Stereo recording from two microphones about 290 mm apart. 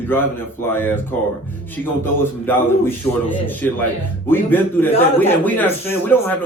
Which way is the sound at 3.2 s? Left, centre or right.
Centre.